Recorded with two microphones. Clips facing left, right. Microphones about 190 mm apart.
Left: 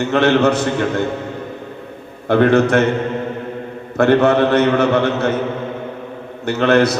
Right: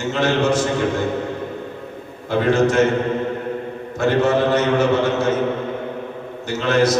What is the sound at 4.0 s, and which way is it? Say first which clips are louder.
A man's voice: left 5 dB; 60° left (ahead or behind).